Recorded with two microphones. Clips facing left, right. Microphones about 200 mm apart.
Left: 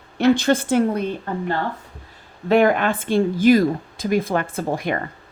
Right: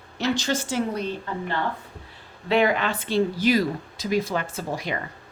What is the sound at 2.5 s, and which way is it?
Speech, 50° left (ahead or behind).